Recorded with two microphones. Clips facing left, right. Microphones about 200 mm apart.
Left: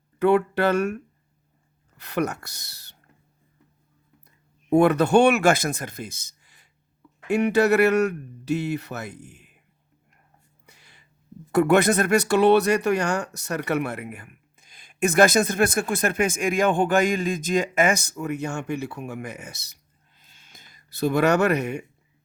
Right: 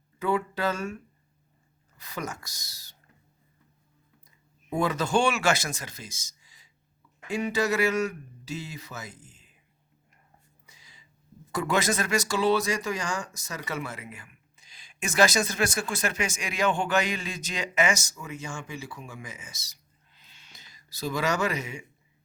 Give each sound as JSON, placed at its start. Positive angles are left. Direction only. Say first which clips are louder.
{"t": 0.2, "sound": "speech", "louder": "left 8 dB", "side_deg": 70}
{"t": 4.7, "sound": "speech", "louder": "left 9 dB", "side_deg": 65}
{"t": 10.7, "sound": "a sound", "louder": "left 4 dB", "side_deg": 65}
{"t": 11.5, "sound": "speech", "louder": "left 9 dB", "side_deg": 60}